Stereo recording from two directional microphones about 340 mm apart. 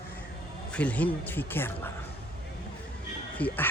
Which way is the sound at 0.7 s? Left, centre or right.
Centre.